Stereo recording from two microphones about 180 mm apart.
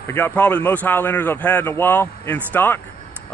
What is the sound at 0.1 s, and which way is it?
Speech, 10° left (ahead or behind).